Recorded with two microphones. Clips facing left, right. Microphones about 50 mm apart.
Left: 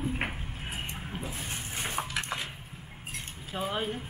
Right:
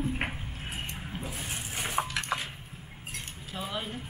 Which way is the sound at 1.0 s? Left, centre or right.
Centre.